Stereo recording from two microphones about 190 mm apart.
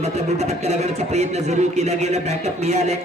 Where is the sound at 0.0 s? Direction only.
35° right (ahead or behind).